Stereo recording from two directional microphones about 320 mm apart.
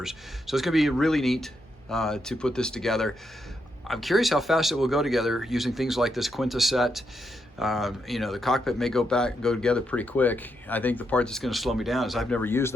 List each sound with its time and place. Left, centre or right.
0.0 s speech: centre